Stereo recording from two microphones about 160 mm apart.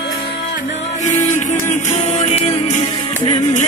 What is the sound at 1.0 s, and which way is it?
Music, 50° left (ahead or behind).